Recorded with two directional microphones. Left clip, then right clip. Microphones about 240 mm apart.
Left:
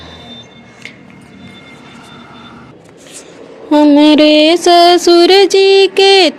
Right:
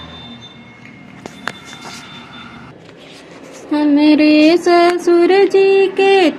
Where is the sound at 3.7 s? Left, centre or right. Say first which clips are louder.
Left 5 dB; left.